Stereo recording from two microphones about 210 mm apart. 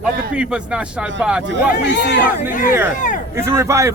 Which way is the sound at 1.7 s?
55° left (ahead or behind).